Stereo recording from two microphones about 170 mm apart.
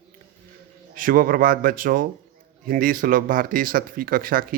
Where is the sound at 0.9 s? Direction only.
55° right (ahead or behind).